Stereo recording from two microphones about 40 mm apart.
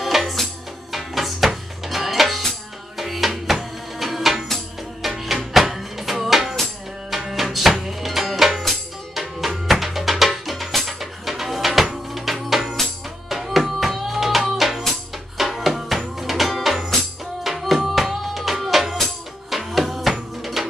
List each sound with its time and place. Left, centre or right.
0.0 s music: centre